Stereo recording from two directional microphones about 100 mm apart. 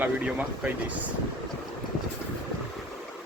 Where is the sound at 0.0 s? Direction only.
15° right (ahead or behind).